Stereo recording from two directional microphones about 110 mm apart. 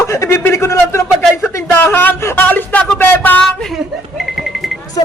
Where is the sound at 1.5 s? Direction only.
15° left (ahead or behind).